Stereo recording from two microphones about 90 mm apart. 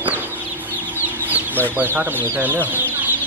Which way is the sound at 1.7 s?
20° right (ahead or behind).